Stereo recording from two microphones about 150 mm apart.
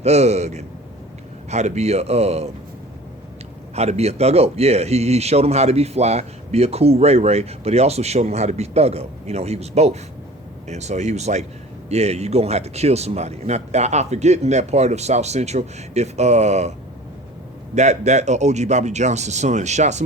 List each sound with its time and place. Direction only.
0.0 s speech: 45° right (ahead or behind)
3.8 s speech: 45° right (ahead or behind)
17.7 s speech: 50° right (ahead or behind)